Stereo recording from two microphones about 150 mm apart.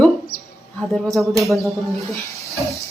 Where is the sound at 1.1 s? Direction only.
Centre (ahead or behind).